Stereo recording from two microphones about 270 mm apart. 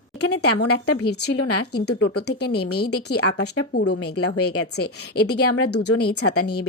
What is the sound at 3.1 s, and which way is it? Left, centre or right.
Speech, left.